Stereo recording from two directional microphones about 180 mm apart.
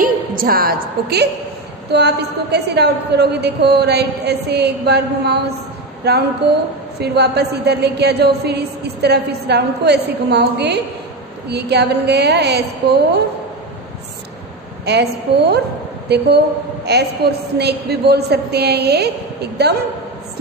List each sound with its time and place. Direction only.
0.0 s a woman's voice: 55° right (ahead or behind)
14.9 s a woman's voice: 65° right (ahead or behind)